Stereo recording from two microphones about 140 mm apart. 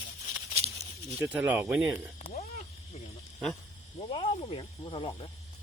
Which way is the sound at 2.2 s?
55° left (ahead or behind).